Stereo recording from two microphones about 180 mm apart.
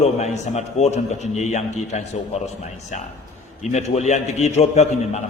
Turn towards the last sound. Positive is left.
turn(degrees=35)  # may be behind; listen again after turning